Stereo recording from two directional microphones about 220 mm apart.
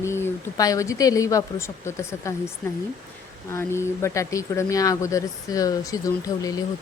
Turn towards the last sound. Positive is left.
turn(degrees=15)  # may be behind; listen again after turning